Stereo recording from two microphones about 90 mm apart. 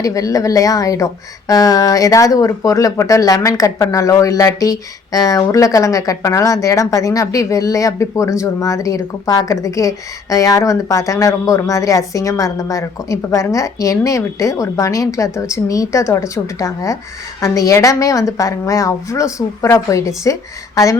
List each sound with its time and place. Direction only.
0.0 s speech: 40° left (ahead or behind)